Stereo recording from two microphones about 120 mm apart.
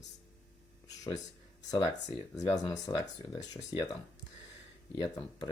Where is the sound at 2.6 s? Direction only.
40° left (ahead or behind).